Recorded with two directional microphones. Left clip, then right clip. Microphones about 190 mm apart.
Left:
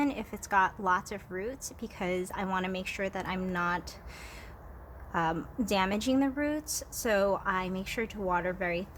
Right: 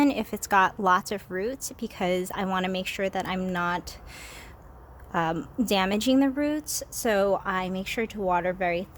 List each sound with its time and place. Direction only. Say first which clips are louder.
0.0 s a woman's voice: right 8 dB; 45° right (ahead or behind)